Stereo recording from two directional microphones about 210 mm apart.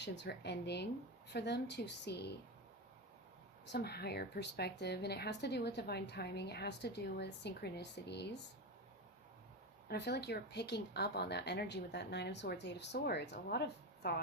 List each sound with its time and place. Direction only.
0.0 s speech: 55° left (ahead or behind)
3.7 s speech: 50° left (ahead or behind)
9.9 s speech: 50° left (ahead or behind)